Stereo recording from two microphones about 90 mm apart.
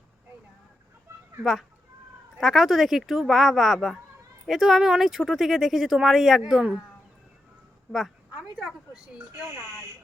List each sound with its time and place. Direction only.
1.1 s a sound: 25° right (ahead or behind)
2.4 s speech: centre (ahead or behind)
8.4 s speech: 5° right (ahead or behind)